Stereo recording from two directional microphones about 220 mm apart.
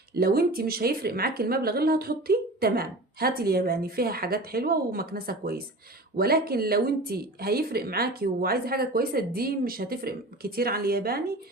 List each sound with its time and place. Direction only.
0.1 s speech: 45° right (ahead or behind)